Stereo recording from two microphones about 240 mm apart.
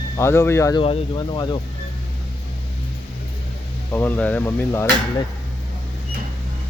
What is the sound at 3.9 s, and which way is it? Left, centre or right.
Speech, centre.